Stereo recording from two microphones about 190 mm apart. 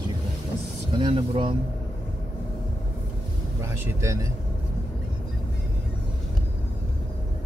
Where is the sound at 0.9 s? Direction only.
30° right (ahead or behind).